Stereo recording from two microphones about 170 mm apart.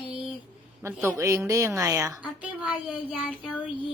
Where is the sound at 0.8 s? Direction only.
15° right (ahead or behind).